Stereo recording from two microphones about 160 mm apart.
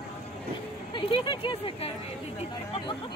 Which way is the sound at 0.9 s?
30° left (ahead or behind).